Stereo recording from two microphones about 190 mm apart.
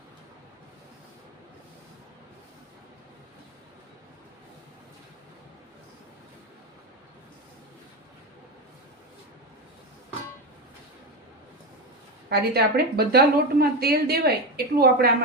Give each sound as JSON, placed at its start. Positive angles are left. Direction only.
{"t": 12.3, "sound": "a woman's voice", "side_deg": -55}